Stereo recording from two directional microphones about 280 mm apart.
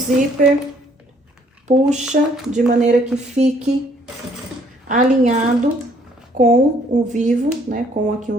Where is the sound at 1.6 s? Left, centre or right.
Right.